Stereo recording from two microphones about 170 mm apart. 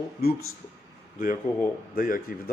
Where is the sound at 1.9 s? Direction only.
55° left (ahead or behind).